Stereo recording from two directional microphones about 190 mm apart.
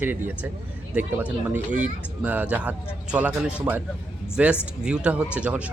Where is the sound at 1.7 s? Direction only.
40° right (ahead or behind).